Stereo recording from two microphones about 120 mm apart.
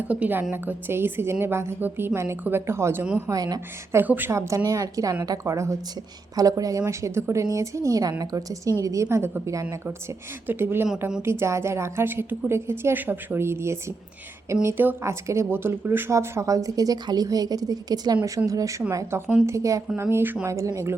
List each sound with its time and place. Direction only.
0.1 s a woman's voice: 15° right (ahead or behind)
3.2 s speech: 30° right (ahead or behind)
3.9 s speech: 15° right (ahead or behind)